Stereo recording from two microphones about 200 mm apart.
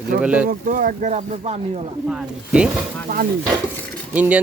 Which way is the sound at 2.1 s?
5° right (ahead or behind).